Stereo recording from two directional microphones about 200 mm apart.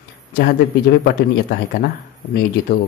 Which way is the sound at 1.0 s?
50° left (ahead or behind).